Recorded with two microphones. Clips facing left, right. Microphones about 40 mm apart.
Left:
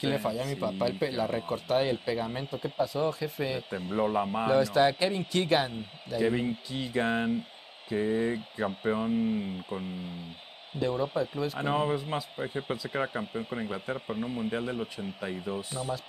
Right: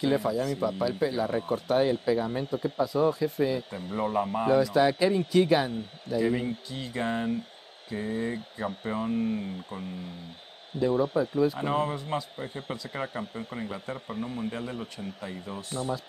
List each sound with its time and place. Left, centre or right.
0.0 s speech: centre
10.7 s speech: centre